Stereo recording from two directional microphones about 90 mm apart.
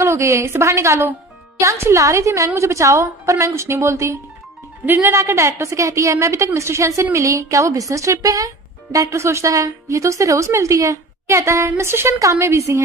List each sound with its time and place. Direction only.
0.0 s a woman's voice: 30° right (ahead or behind)